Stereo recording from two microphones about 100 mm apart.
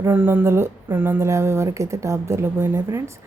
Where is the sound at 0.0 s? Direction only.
20° right (ahead or behind).